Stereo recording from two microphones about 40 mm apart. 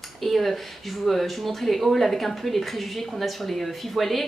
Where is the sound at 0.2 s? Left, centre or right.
Centre.